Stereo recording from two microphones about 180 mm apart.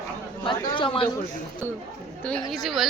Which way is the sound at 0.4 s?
25° left (ahead or behind).